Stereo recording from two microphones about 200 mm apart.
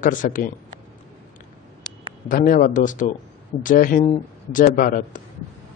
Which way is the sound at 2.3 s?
40° left (ahead or behind).